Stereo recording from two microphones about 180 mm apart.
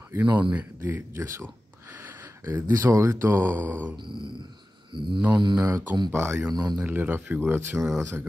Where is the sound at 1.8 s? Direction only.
10° right (ahead or behind).